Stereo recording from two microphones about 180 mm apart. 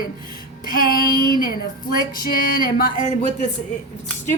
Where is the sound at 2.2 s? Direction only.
55° left (ahead or behind).